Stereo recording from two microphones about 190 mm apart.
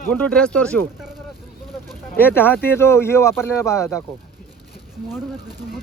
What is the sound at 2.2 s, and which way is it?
Speech, 10° left (ahead or behind).